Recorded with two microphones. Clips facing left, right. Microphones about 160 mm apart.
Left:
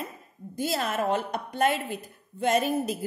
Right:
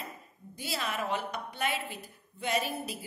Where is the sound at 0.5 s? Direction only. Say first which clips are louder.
Left 7 dB; 45° left (ahead or behind).